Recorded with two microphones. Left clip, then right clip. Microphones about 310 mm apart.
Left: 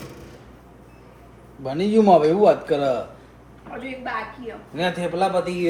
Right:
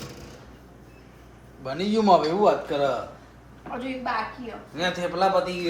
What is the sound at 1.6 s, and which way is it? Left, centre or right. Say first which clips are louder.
A man's voice: left 4 dB; left.